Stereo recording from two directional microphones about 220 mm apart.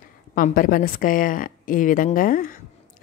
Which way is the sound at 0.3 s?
40° left (ahead or behind).